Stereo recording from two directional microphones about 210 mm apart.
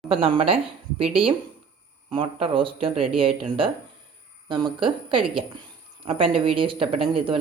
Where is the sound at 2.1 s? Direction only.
25° right (ahead or behind).